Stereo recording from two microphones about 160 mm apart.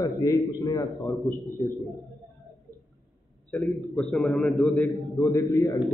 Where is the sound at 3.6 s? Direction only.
5° left (ahead or behind).